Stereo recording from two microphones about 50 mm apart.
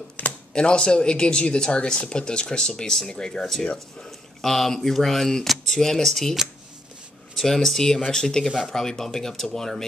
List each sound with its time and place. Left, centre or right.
0.5 s speech: centre
7.3 s speech: centre